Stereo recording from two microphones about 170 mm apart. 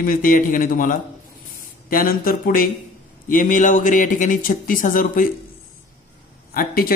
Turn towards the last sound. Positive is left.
turn(degrees=60)  # may be behind; listen again after turning